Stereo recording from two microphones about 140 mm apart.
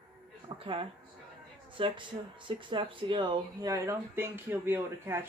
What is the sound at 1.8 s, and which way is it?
Speech, 40° right (ahead or behind).